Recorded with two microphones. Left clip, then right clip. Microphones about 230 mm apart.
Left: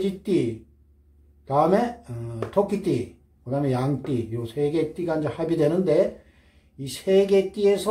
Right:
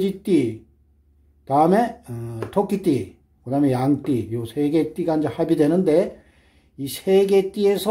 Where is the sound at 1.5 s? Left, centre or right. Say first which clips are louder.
Right 3 dB; right.